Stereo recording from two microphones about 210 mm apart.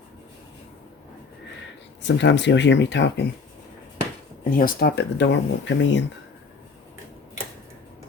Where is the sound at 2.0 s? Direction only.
55° left (ahead or behind).